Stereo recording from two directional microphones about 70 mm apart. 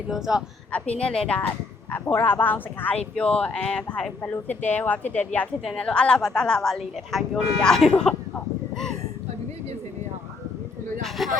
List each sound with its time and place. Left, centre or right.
0.1 s speech: centre
0.7 s a woman's voice: centre
1.9 s speech: left
4.2 s a woman's voice: left; by 8.1 s centre
11.2 s speech: centre